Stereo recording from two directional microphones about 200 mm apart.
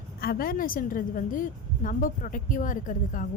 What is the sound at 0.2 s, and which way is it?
A woman's voice, 50° left (ahead or behind).